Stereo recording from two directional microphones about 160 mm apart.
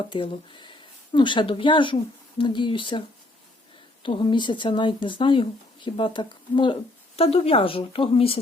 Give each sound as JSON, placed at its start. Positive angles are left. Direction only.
{"t": 0.0, "sound": "speech", "side_deg": 30}
{"t": 4.0, "sound": "speech", "side_deg": 30}